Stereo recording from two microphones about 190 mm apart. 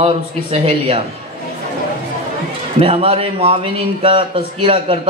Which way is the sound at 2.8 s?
30° right (ahead or behind).